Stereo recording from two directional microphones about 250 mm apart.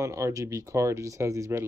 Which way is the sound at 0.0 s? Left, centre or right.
Centre.